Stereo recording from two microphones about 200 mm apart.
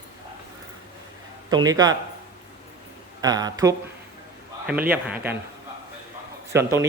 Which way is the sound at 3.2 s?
20° right (ahead or behind).